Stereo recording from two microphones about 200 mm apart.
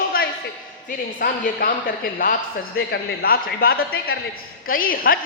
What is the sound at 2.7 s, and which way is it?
A man's voice, 50° left (ahead or behind).